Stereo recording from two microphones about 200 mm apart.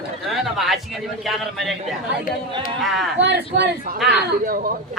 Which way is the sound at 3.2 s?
60° right (ahead or behind).